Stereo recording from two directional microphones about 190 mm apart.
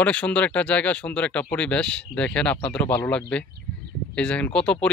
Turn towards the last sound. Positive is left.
turn(degrees=5)  # may be behind; listen again after turning